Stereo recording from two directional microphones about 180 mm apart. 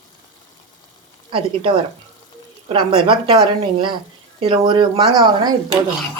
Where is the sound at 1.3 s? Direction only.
30° right (ahead or behind).